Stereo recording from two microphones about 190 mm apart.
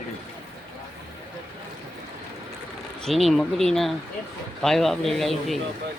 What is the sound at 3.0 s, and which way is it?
Speech, centre (ahead or behind).